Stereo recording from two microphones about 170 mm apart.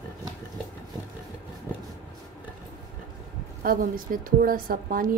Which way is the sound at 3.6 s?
55° right (ahead or behind).